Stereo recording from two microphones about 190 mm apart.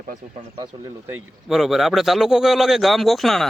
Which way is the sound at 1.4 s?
Centre (ahead or behind).